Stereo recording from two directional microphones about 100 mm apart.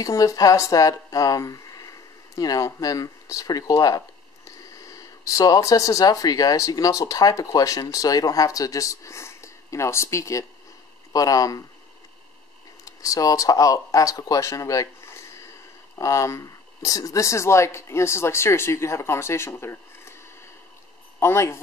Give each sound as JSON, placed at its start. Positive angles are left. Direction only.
{"t": 0.0, "sound": "speech", "side_deg": 35}
{"t": 12.8, "sound": "speech", "side_deg": 35}
{"t": 21.2, "sound": "speech", "side_deg": 25}